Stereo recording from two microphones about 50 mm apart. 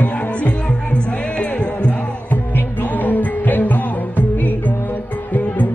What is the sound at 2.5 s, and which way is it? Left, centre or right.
Music, left.